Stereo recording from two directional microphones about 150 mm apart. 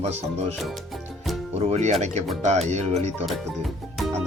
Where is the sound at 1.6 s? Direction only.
50° right (ahead or behind).